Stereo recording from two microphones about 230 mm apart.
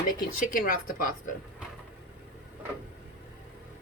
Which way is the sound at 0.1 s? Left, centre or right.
Left.